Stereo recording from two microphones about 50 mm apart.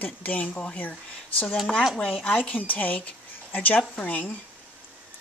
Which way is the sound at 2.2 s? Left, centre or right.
Left.